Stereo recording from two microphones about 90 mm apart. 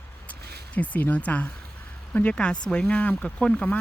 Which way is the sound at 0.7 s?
15° left (ahead or behind).